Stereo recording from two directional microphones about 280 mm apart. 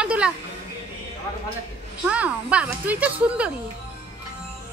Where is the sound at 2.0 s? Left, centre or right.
Centre.